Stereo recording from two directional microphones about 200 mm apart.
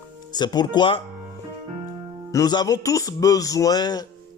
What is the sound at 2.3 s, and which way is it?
Speech, 20° left (ahead or behind).